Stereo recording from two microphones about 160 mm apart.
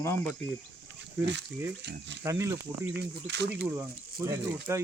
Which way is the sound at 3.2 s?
90° right.